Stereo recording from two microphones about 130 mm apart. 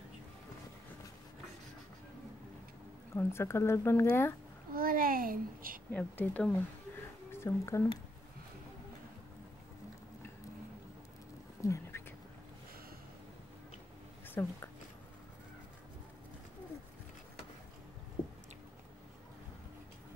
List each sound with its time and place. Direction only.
3.2 s speech: 20° left (ahead or behind)
4.7 s a child's voice: 90° right
5.9 s speech: 15° left (ahead or behind)
11.6 s a sound: 25° left (ahead or behind)
14.2 s a woman's voice: 15° left (ahead or behind)